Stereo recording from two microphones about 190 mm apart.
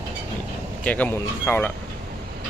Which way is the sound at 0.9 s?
10° left (ahead or behind).